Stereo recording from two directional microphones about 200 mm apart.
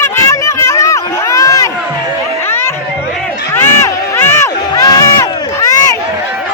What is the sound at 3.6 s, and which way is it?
Crowd, 10° left (ahead or behind).